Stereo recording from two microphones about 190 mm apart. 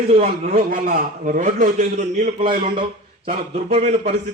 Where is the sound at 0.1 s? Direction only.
35° right (ahead or behind).